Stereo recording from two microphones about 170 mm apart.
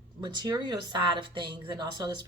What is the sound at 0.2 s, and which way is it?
Speech, 25° right (ahead or behind).